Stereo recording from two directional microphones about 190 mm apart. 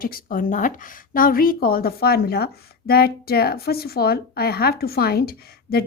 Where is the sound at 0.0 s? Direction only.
50° left (ahead or behind).